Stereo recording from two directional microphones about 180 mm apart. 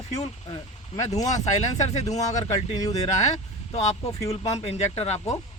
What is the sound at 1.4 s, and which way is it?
Speech, 40° left (ahead or behind).